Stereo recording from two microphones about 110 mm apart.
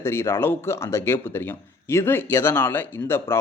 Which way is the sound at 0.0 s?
25° left (ahead or behind).